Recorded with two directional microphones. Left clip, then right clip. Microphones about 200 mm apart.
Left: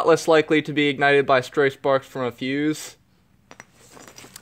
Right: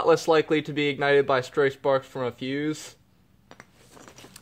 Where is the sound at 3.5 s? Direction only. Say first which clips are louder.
Left 4 dB; 30° left (ahead or behind).